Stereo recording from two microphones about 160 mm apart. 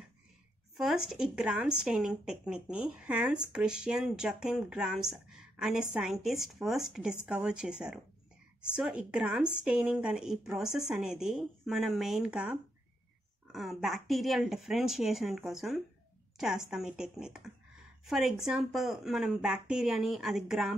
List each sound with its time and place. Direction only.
0.7 s a woman's voice: 5° right (ahead or behind)